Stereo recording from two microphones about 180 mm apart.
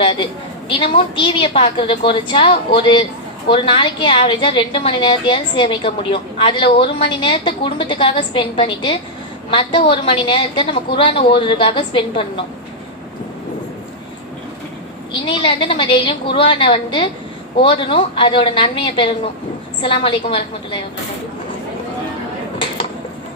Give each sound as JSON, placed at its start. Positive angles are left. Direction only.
{"t": 0.0, "sound": "a woman's voice", "side_deg": 30}
{"t": 15.3, "sound": "a woman's voice", "side_deg": 30}